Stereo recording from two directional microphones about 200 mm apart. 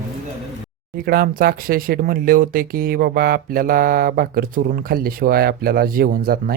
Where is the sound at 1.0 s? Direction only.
50° right (ahead or behind).